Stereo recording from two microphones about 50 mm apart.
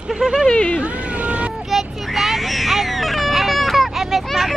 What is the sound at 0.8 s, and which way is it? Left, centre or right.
Cat, right.